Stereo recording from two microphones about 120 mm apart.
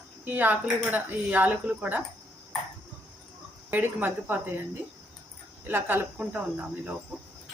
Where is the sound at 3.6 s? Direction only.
15° right (ahead or behind).